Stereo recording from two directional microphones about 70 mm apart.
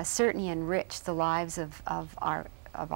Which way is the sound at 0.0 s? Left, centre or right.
Right.